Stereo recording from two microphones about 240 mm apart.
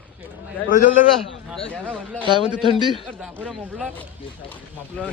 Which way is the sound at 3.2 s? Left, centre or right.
Centre.